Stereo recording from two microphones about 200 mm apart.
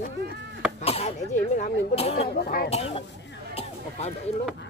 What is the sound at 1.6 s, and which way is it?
Speech, 30° left (ahead or behind).